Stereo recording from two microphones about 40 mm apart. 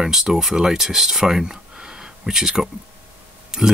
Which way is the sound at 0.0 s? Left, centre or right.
Centre.